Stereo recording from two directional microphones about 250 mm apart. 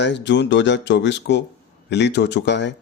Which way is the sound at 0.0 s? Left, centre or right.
Left.